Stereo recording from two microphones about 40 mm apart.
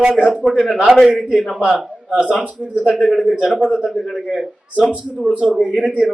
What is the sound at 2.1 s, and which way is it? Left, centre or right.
Speech, right.